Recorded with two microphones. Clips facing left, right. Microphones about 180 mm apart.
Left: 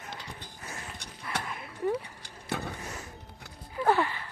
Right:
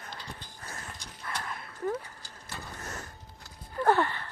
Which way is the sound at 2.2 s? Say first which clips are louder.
Left 9 dB; 60° left (ahead or behind).